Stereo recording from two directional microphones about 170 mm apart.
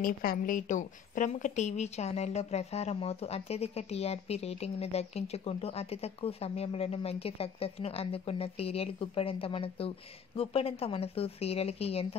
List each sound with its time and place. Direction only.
0.0 s a woman's voice: 55° left (ahead or behind); by 12.2 s 35° left (ahead or behind)